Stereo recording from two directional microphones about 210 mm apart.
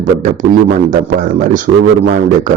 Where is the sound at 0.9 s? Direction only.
40° right (ahead or behind).